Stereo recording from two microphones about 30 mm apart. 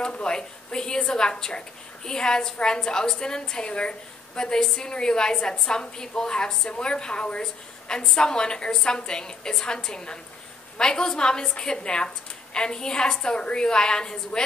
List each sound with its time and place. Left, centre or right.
0.2 s a woman's voice: left